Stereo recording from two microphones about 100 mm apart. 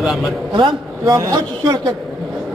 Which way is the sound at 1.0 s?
35° right (ahead or behind).